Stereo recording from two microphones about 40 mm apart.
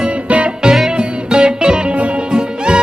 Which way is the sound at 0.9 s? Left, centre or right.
Right.